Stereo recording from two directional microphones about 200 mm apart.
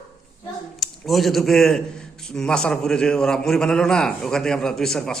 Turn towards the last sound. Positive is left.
turn(degrees=0)  # may be behind; listen again after turning